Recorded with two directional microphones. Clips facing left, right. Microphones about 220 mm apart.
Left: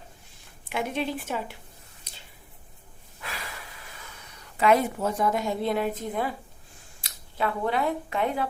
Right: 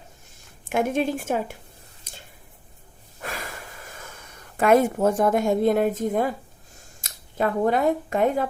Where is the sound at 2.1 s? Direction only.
50° right (ahead or behind).